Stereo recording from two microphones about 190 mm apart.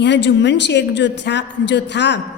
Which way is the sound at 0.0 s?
65° left (ahead or behind).